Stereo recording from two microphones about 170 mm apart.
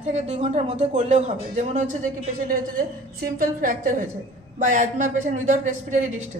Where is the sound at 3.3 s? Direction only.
55° right (ahead or behind).